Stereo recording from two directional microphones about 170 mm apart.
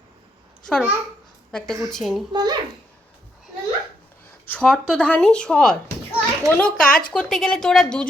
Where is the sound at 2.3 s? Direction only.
25° right (ahead or behind).